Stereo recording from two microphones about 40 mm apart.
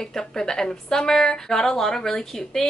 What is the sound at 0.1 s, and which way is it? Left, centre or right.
A woman's voice, centre.